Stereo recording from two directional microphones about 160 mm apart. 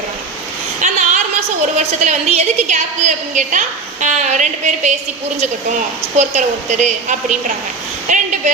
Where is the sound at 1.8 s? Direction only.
45° right (ahead or behind).